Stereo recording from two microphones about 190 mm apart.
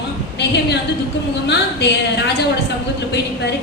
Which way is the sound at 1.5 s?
65° left (ahead or behind).